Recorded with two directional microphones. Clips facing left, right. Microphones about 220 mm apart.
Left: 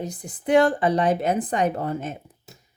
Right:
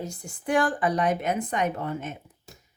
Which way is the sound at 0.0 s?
20° left (ahead or behind).